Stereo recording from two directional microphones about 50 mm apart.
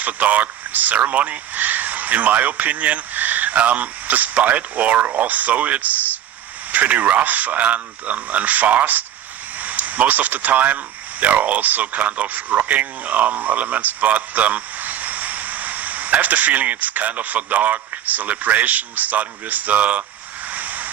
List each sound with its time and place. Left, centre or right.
0.0 s speech: right
20.5 s vehicle: right